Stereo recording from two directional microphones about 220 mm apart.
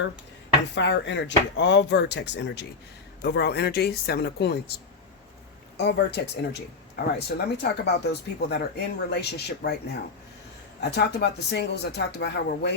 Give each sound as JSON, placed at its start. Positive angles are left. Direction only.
{"t": 0.8, "sound": "speech", "side_deg": 55}
{"t": 5.7, "sound": "speech", "side_deg": 50}
{"t": 10.8, "sound": "speech", "side_deg": 50}